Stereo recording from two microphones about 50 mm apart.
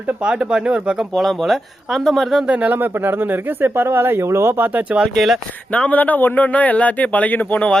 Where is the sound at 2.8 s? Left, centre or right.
Right.